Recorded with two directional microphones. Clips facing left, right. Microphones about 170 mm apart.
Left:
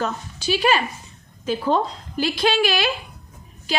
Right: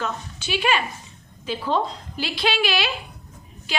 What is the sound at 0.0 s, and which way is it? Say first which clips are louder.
A woman's voice: left 4 dB; 40° left (ahead or behind).